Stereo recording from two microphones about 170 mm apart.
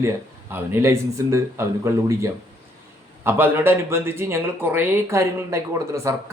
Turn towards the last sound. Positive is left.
turn(degrees=-15)  # may be behind; listen again after turning